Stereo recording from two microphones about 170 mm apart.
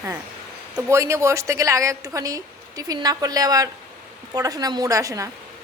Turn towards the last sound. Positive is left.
turn(degrees=-20)  # may be behind; listen again after turning